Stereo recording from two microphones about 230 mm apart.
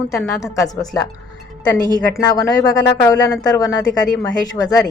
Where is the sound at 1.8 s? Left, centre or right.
Centre.